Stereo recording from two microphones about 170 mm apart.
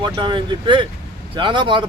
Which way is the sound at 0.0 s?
30° right (ahead or behind).